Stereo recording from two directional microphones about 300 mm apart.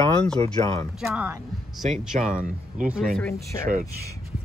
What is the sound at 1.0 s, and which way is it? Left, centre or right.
Speech, centre.